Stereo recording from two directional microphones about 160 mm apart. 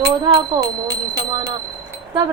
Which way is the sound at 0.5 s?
25° right (ahead or behind).